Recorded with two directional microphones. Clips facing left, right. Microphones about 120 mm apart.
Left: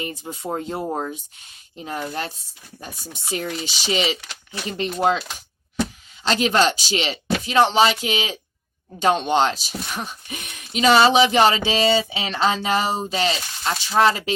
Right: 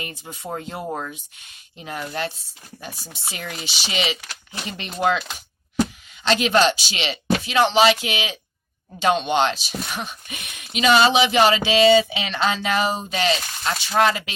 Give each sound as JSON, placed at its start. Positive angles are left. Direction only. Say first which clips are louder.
{"t": 0.2, "sound": "speech", "louder": "left 4 dB", "side_deg": 40}
{"t": 6.2, "sound": "speech", "louder": "right 1 dB", "side_deg": 35}